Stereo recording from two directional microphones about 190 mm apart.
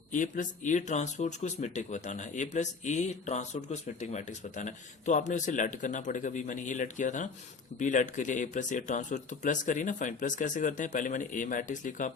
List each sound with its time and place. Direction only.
0.1 s speech: 45° left (ahead or behind)